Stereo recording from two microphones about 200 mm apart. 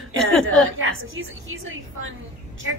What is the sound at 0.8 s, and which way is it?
A woman's voice, 80° right.